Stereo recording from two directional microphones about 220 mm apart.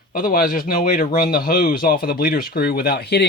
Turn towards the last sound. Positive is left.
turn(degrees=45)  # may be behind; listen again after turning